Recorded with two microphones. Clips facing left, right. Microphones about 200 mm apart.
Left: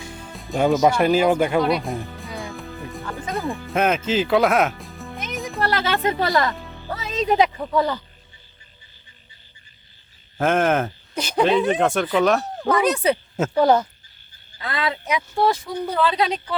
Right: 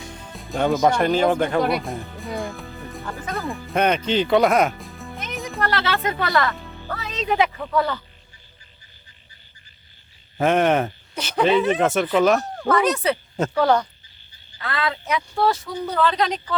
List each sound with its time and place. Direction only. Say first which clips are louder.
0.1 s speech: left 3 dB; centre (ahead or behind)
1.7 s music: left 2 dB; centre (ahead or behind)
3.3 s speech: left 1 dB; centre (ahead or behind)
5.3 s music: left 1 dB; centre (ahead or behind)
5.6 s music: left 1 dB; 15° left (ahead or behind)
6.0 s speech: left 3 dB; 30° left (ahead or behind)
6.3 s music: left 1 dB; 15° left (ahead or behind)
7.4 s speech: left 1 dB; 20° left (ahead or behind)
10.3 s speech: right 1 dB; centre (ahead or behind)
11.1 s speech: left 3 dB; 15° left (ahead or behind)
11.4 s speech: right 1 dB; centre (ahead or behind)
12.5 s speech: even; 15° left (ahead or behind)
13.5 s speech: left 2 dB; 20° left (ahead or behind)